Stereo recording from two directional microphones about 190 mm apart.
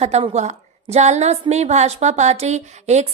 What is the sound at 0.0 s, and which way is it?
A woman's voice, 35° right (ahead or behind).